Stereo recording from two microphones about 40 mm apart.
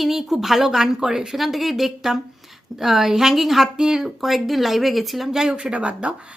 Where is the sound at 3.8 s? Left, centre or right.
Centre.